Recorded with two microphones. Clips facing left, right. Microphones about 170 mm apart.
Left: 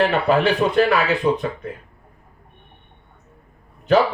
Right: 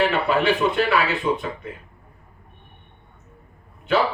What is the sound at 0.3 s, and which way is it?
Speech, 40° left (ahead or behind).